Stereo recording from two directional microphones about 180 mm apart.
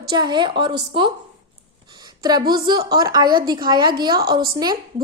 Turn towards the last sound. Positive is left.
turn(degrees=-20)  # may be behind; listen again after turning